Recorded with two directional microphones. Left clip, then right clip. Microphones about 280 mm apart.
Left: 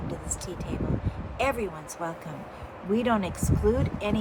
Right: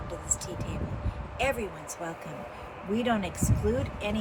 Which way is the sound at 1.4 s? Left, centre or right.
Centre.